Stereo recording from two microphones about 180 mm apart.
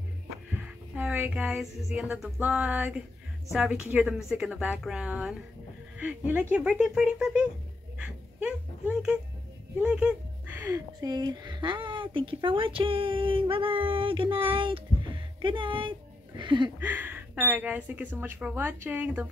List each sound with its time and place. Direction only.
0.5 s a woman's voice: 10° right (ahead or behind); by 16.7 s 25° right (ahead or behind)
16.8 s speech: 10° right (ahead or behind)